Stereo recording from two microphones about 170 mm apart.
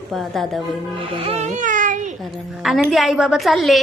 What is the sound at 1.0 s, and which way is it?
A child's voice, 35° right (ahead or behind).